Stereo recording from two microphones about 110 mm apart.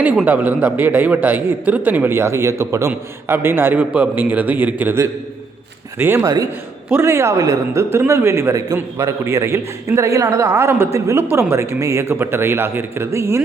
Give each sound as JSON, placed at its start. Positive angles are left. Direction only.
{"t": 0.3, "sound": "speech", "side_deg": -15}
{"t": 6.2, "sound": "a man's voice", "side_deg": -35}